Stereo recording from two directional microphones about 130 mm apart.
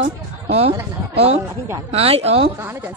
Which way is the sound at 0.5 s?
55° right (ahead or behind).